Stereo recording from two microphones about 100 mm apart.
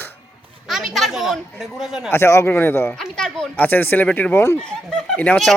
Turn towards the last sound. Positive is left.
turn(degrees=15)  # may be behind; listen again after turning